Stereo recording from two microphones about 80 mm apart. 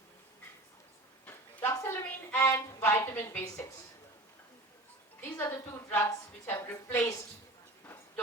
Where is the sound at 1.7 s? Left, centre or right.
Left.